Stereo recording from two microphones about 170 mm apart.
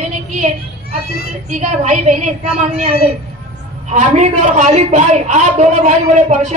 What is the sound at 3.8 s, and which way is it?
A man's voice, 45° right (ahead or behind).